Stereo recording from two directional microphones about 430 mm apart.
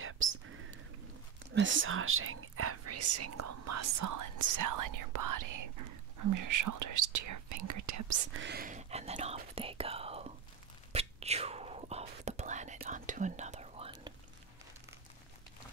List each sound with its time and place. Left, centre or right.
0.0 s whispering: right
1.5 s speech: right
8.4 s speech: right
10.9 s whispering: centre